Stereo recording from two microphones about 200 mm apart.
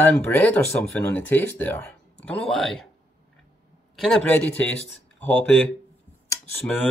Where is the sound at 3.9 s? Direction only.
Centre (ahead or behind).